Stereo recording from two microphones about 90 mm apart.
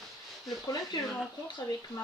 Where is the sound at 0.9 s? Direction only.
50° left (ahead or behind).